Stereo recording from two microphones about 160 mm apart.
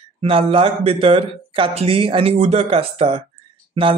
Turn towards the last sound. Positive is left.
turn(degrees=-35)  # may be behind; listen again after turning